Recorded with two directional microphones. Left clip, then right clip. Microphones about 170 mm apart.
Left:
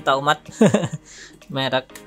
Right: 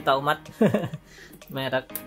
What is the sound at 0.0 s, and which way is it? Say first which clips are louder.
Speech: left 4 dB; 20° left (ahead or behind).